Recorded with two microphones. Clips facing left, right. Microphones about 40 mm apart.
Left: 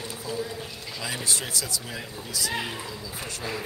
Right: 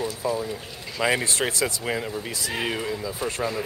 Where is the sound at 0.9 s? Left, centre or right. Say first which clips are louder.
Right 8 dB; right.